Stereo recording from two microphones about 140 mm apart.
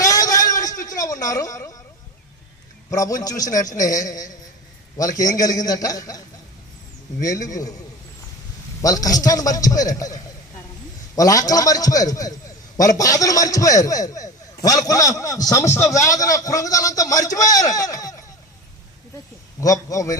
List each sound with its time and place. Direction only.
0.0 s a sound: 25° left (ahead or behind)
0.9 s a woman's voice: 25° left (ahead or behind)
2.9 s a man's voice: 25° left (ahead or behind)
3.6 s a man's voice: 60° left (ahead or behind)
3.8 s a man's voice: 25° left (ahead or behind)
8.8 s a man's voice: 25° left (ahead or behind)
19.5 s a man's voice: 25° left (ahead or behind)